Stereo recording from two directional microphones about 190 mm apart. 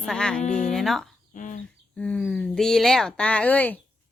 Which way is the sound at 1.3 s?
45° left (ahead or behind).